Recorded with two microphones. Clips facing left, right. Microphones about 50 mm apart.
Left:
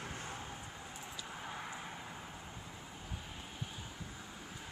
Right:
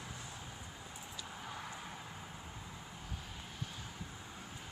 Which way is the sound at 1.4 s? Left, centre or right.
Centre.